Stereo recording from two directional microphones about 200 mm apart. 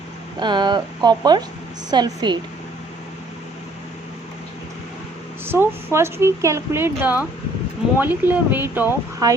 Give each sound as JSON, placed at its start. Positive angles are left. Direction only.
{"t": 0.3, "sound": "speech", "side_deg": -20}
{"t": 5.5, "sound": "speech", "side_deg": -10}